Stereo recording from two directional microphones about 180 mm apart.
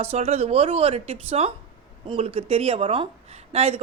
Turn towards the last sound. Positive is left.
turn(degrees=-35)  # may be behind; listen again after turning